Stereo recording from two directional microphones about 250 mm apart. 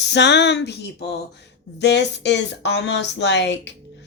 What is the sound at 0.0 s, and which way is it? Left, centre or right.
Speech, left.